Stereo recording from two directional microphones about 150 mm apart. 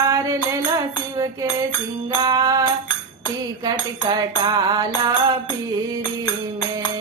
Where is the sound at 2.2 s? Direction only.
25° right (ahead or behind).